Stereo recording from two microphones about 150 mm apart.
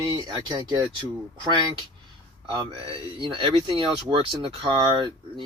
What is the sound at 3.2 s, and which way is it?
Speech, 35° right (ahead or behind).